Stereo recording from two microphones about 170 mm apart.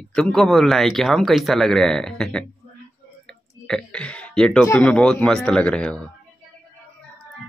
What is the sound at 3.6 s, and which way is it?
Speech, 5° left (ahead or behind).